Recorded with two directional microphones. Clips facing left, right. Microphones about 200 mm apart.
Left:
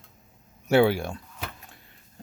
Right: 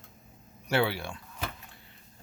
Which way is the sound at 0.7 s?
45° left (ahead or behind).